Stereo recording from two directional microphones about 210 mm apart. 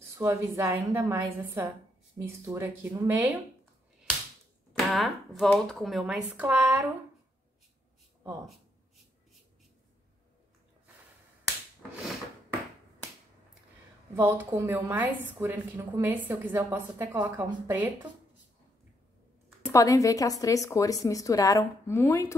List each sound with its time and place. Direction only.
0.1 s a woman's voice: 15° right (ahead or behind)
4.7 s speech: centre (ahead or behind)
14.1 s a woman's voice: 10° right (ahead or behind)
19.7 s a woman's voice: 15° left (ahead or behind)